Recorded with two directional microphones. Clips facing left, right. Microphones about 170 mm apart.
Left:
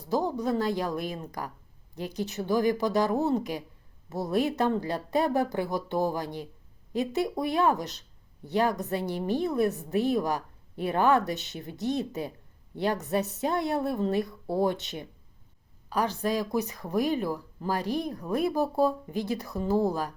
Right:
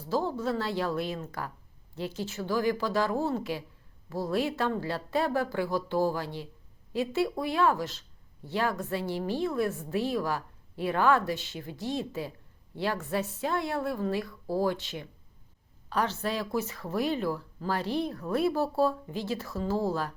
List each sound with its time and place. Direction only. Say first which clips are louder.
0.1 s speech: left 2 dB; 15° left (ahead or behind)